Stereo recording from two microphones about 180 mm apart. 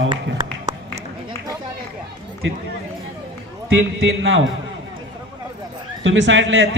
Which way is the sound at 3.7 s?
90° right.